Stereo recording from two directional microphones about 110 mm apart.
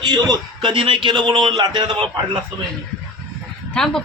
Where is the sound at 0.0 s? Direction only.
40° right (ahead or behind).